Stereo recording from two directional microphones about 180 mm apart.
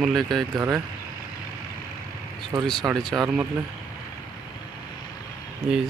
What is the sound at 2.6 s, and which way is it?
Speech, centre (ahead or behind).